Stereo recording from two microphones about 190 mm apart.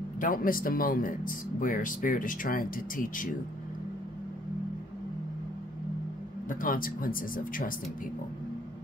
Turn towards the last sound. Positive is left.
turn(degrees=45)  # may be behind; listen again after turning